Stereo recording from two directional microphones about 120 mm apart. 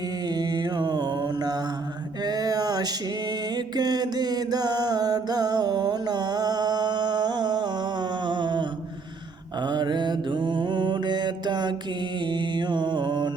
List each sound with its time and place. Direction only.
0.3 s mantra: 35° right (ahead or behind)
2.2 s a sound: 35° right (ahead or behind)
3.5 s mantra: 35° right (ahead or behind)